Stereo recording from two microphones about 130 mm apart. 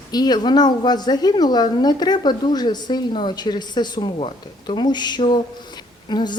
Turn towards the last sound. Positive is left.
turn(degrees=35)  # may be behind; listen again after turning